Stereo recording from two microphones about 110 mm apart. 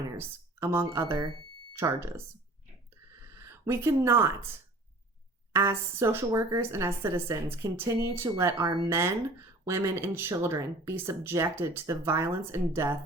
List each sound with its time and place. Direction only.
0.2 s speech: 25° right (ahead or behind)
5.5 s speech: 25° right (ahead or behind)
8.5 s speech: 50° right (ahead or behind)
8.9 s speech: 25° right (ahead or behind)